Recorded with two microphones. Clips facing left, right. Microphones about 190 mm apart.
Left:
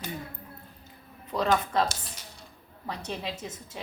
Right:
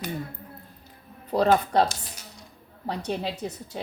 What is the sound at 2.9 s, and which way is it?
Speech, 35° right (ahead or behind).